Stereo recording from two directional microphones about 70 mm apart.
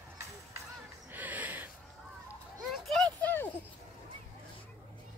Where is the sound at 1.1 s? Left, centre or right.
Right.